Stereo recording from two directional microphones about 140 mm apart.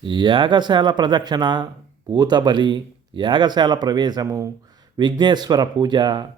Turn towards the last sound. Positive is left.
turn(degrees=-30)  # may be behind; listen again after turning